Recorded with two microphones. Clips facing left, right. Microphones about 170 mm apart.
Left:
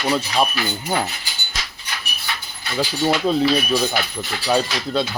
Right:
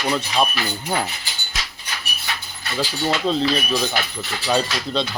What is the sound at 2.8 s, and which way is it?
Speech, 10° left (ahead or behind).